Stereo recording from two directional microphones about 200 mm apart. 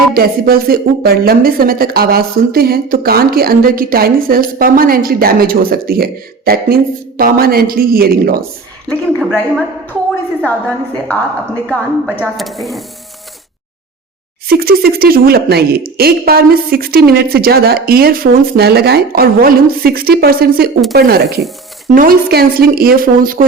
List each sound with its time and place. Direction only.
0.1 s a woman's voice: 50° right (ahead or behind)
8.9 s a woman's voice: 5° left (ahead or behind)
10.4 s a woman's voice: 10° left (ahead or behind)
14.4 s a woman's voice: 50° right (ahead or behind)